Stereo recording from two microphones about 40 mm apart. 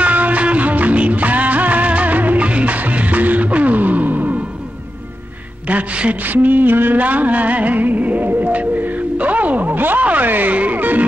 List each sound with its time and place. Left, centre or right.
0.0 s music: right
5.7 s a man's voice: right
6.2 s a sound: right
7.0 s music: right
10.0 s a sound: right
10.5 s music: right